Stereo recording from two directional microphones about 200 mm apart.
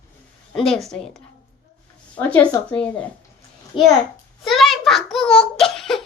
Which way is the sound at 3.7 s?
25° left (ahead or behind).